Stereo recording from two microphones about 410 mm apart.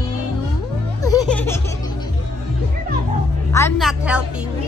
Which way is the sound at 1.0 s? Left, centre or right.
Centre.